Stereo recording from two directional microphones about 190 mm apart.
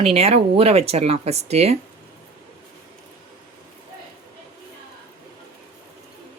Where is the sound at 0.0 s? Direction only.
30° right (ahead or behind).